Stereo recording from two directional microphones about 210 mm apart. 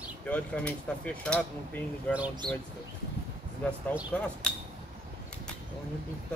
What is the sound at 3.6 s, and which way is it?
Speech, 5° left (ahead or behind).